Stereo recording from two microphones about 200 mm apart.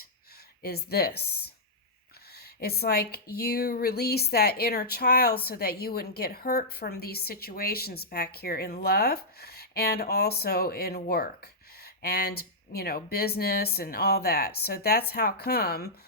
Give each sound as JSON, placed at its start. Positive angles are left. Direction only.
{"t": 0.6, "sound": "speech", "side_deg": 50}
{"t": 2.6, "sound": "speech", "side_deg": 50}